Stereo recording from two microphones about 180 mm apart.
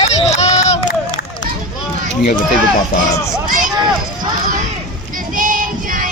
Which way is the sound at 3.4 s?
50° right (ahead or behind).